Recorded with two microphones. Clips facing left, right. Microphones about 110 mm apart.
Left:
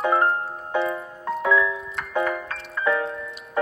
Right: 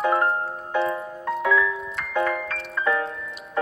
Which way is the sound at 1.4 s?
25° left (ahead or behind).